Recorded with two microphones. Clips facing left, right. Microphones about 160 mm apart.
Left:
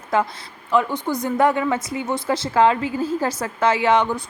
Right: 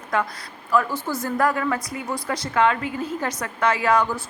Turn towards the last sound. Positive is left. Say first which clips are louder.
# left 2 dB
turn(degrees=25)  # may be behind; listen again after turning